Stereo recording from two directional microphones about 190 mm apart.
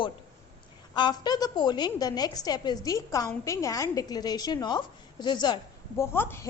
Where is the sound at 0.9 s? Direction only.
25° left (ahead or behind).